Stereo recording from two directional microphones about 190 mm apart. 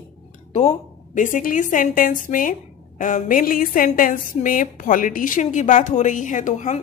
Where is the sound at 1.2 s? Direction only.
45° left (ahead or behind).